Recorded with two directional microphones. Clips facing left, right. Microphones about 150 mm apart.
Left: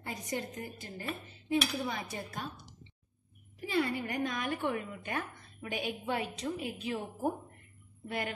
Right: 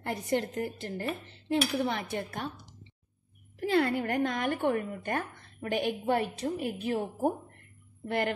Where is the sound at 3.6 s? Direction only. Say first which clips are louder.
Right 5 dB; 70° right (ahead or behind); by 7.3 s 45° right (ahead or behind).